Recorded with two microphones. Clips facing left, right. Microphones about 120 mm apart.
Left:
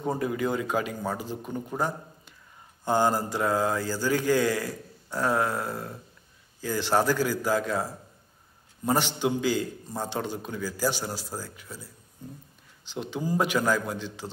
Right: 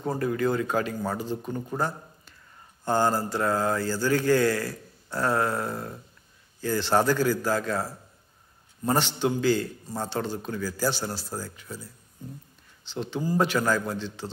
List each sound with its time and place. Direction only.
0.0 s mantra: 10° left (ahead or behind)
12.9 s mantra: 10° left (ahead or behind)